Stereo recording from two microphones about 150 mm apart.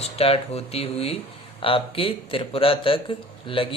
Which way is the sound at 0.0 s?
40° left (ahead or behind).